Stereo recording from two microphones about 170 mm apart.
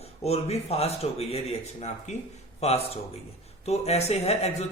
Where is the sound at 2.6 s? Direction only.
35° left (ahead or behind).